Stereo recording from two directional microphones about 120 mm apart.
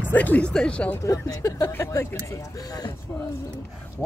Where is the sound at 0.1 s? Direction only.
15° left (ahead or behind).